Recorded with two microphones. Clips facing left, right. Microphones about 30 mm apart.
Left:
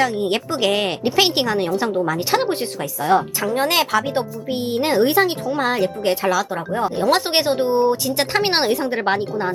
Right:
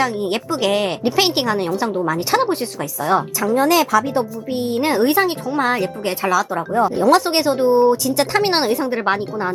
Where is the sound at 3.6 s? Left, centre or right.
Left.